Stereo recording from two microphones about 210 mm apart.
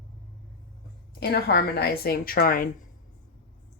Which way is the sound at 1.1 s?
50° left (ahead or behind).